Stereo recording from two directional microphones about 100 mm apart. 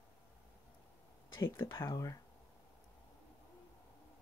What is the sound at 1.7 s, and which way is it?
Speech, 25° left (ahead or behind).